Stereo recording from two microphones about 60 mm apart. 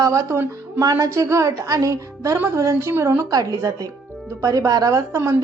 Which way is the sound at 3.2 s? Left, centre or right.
Right.